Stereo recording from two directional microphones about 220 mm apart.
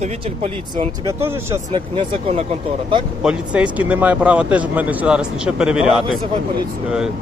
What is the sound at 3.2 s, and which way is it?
Speech, 5° right (ahead or behind).